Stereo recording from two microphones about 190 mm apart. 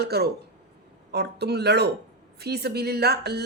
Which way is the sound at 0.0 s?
55° right (ahead or behind).